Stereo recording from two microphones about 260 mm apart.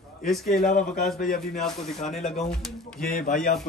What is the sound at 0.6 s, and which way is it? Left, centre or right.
Speech, left.